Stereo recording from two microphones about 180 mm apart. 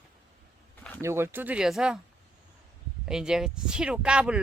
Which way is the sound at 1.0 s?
15° right (ahead or behind).